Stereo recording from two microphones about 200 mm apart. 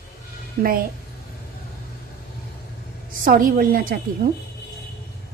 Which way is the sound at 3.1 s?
45° right (ahead or behind).